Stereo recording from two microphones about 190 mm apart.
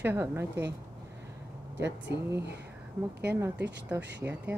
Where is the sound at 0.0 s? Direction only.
10° right (ahead or behind).